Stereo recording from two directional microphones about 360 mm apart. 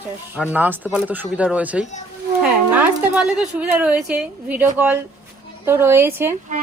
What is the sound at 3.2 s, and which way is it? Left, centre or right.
A woman's voice, centre.